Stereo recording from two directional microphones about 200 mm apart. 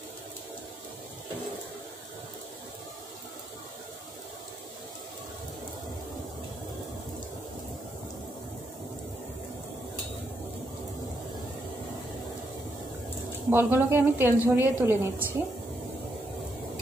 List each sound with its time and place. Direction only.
13.5 s a woman's voice: 10° right (ahead or behind)